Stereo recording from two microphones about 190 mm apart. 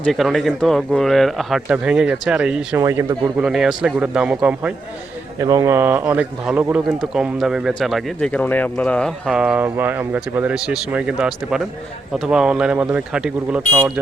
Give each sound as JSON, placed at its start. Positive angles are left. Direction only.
{"t": 0.0, "sound": "a man's voice", "side_deg": 0}
{"t": 2.8, "sound": "speech", "side_deg": -15}
{"t": 3.4, "sound": "a man's voice", "side_deg": 0}
{"t": 5.4, "sound": "a man's voice", "side_deg": -15}